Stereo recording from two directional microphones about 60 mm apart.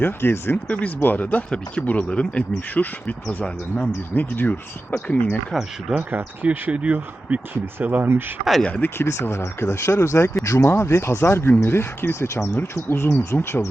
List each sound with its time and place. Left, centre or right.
0.0 s speech: left
0.5 s speech: left
3.2 s speech: centre
4.1 s speech: left
5.9 s speech: right
6.7 s speech: right
9.0 s speech: left